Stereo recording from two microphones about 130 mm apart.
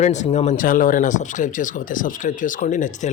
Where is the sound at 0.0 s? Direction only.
60° left (ahead or behind).